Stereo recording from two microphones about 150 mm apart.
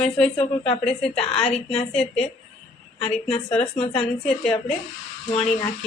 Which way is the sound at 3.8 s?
45° left (ahead or behind).